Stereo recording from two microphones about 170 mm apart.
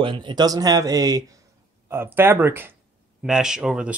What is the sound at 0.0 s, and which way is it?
Speech, 30° right (ahead or behind).